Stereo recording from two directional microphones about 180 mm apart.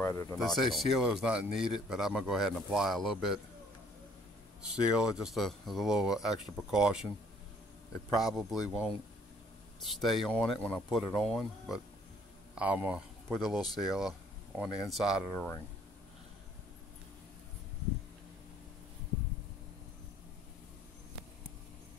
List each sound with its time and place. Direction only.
0.0 s speech: 15° left (ahead or behind)
0.4 s speech: centre (ahead or behind)
5.1 s speech: centre (ahead or behind)
8.1 s speech: centre (ahead or behind)
15.3 s speech: 15° left (ahead or behind)